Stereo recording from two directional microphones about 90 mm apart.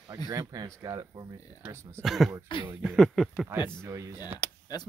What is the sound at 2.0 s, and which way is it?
Speech, centre (ahead or behind).